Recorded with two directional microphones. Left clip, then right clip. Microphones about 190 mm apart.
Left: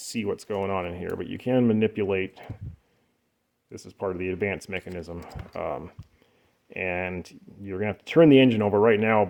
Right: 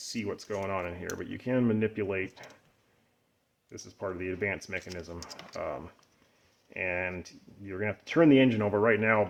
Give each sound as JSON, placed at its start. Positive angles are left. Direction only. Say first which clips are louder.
{"t": 0.1, "sound": "speech", "louder": "left 6 dB", "side_deg": 40}
{"t": 3.7, "sound": "speech", "louder": "left 6 dB", "side_deg": 40}